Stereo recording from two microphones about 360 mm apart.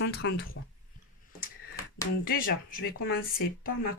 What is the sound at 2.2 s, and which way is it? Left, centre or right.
A woman's voice, left.